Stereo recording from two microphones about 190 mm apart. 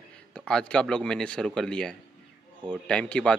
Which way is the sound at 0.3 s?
5° left (ahead or behind).